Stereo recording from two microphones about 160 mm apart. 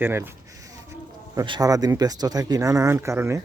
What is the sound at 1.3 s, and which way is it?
Speech, 25° right (ahead or behind).